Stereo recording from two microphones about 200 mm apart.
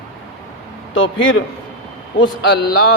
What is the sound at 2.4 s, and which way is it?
Speech, 55° left (ahead or behind).